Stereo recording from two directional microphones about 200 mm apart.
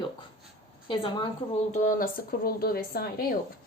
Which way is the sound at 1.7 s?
40° left (ahead or behind).